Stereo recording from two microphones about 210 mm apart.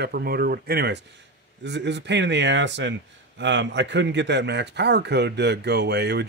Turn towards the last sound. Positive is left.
turn(degrees=-50)  # may be behind; listen again after turning